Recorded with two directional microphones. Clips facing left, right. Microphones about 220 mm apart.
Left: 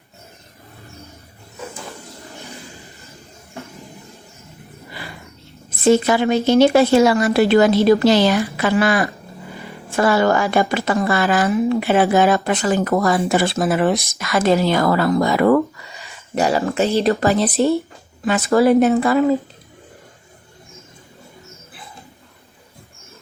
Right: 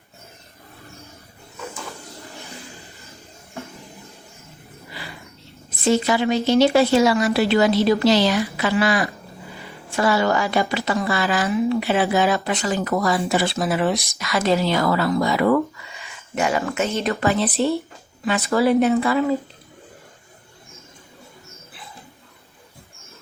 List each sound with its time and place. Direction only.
5.8 s a woman's voice: 50° left (ahead or behind)
16.1 s a sound: 35° left (ahead or behind)
16.7 s a woman's voice: 30° left (ahead or behind)